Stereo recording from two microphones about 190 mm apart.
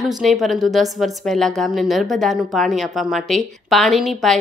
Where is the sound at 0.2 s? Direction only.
Centre (ahead or behind).